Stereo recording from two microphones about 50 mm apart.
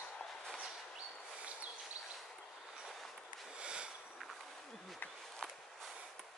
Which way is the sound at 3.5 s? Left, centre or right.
Centre.